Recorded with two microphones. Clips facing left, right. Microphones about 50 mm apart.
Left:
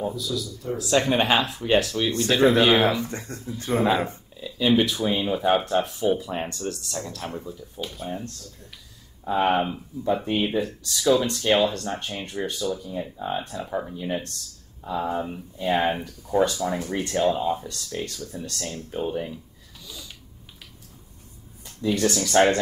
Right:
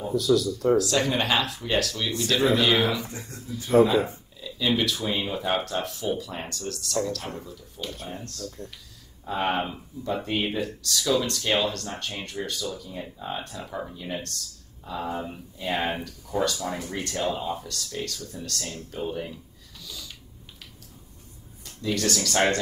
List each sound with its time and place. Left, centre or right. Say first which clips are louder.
0.1 s speech: right 8 dB; right
0.7 s speech: left 2 dB; left
2.0 s speech: left 3 dB; left
3.1 s speech: left 5 dB; left
3.7 s speech: right 6 dB; left
4.4 s speech: left 5 dB; left
5.7 s speech: left 6 dB; left
9.2 s speech: left 5 dB; centre
19.8 s a sound: even; centre
21.9 s speech: left 5 dB; centre